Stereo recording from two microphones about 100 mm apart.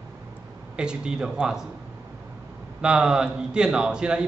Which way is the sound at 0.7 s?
10° right (ahead or behind).